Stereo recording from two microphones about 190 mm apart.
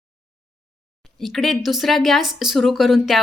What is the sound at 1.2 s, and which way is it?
Speech, centre (ahead or behind).